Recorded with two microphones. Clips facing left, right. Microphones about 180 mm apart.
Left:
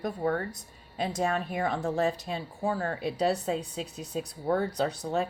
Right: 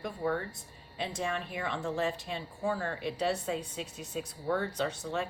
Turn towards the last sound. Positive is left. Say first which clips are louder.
# left 4 dB
turn(degrees=40)  # may be behind; listen again after turning